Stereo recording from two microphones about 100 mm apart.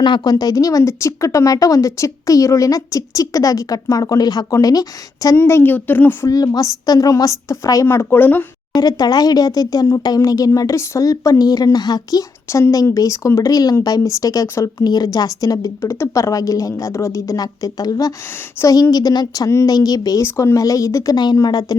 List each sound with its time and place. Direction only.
0.0 s speech: 45° left (ahead or behind)
5.4 s speech: 25° left (ahead or behind)
6.2 s speech: 40° left (ahead or behind); by 8.4 s 20° left (ahead or behind)
8.7 s speech: 40° left (ahead or behind)
12.5 s speech: 30° left (ahead or behind)